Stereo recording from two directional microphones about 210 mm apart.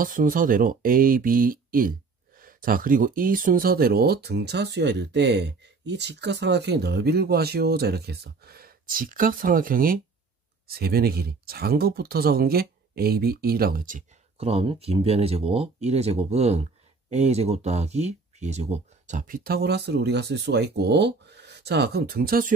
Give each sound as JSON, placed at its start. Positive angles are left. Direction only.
{"t": 0.0, "sound": "speech", "side_deg": -40}